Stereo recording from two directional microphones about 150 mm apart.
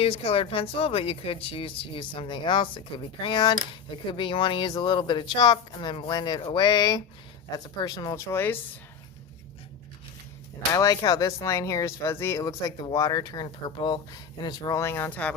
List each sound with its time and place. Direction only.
0.0 s speech: 40° left (ahead or behind); by 8.5 s 15° left (ahead or behind)
10.7 s speech: 25° left (ahead or behind)